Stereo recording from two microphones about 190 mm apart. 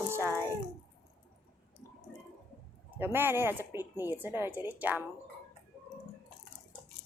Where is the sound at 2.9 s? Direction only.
10° right (ahead or behind).